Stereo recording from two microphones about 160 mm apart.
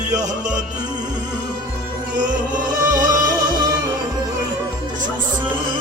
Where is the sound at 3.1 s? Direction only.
25° right (ahead or behind).